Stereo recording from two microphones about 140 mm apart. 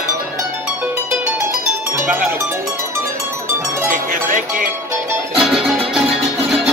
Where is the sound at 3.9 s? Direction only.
70° right (ahead or behind).